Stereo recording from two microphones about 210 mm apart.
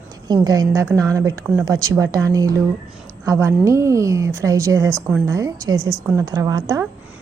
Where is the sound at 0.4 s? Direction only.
20° right (ahead or behind).